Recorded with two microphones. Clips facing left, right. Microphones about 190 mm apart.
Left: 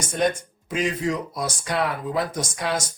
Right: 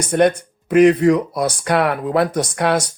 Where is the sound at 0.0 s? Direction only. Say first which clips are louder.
Right 8 dB; 65° right (ahead or behind).